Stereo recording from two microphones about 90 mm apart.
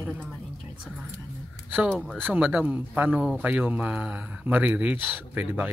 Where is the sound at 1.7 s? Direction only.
20° right (ahead or behind).